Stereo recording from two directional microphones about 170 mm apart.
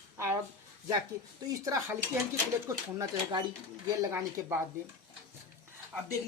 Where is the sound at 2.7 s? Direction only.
20° right (ahead or behind).